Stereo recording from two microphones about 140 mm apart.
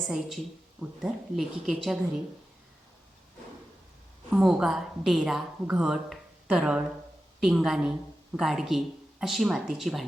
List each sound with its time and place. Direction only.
0.1 s a woman's voice: centre (ahead or behind)
4.3 s a woman's voice: 5° right (ahead or behind)